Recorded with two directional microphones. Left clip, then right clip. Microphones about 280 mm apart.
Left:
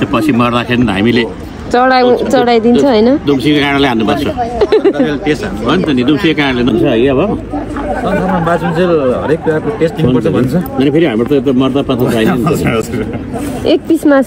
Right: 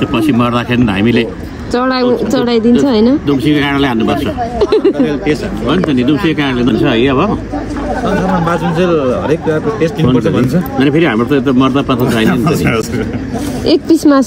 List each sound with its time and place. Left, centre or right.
0.1 s speech: centre
4.9 s speech: centre
5.9 s speech: centre
8.7 s speech: centre
10.8 s speech: centre
13.7 s speech: centre